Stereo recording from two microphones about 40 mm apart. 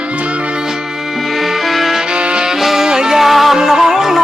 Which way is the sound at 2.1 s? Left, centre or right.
Right.